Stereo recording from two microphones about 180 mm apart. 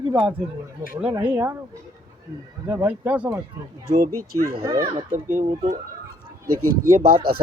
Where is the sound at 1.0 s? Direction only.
10° right (ahead or behind).